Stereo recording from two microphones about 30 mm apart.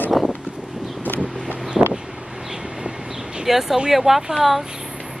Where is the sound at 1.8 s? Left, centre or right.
Right.